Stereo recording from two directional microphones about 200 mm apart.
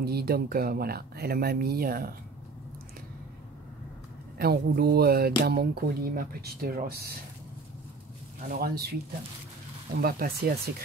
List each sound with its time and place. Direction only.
0.0 s speech: 50° right (ahead or behind)
4.4 s speech: 50° right (ahead or behind)
8.4 s speech: 45° right (ahead or behind)
10.0 s speech: 50° right (ahead or behind)